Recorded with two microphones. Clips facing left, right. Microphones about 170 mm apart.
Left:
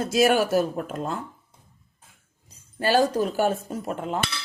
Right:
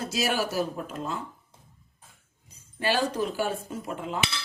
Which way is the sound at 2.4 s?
40° left (ahead or behind).